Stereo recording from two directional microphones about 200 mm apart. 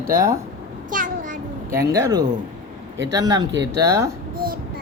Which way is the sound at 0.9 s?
40° right (ahead or behind).